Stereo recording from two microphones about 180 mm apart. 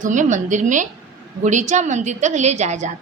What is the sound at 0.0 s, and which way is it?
A woman's voice, 45° right (ahead or behind).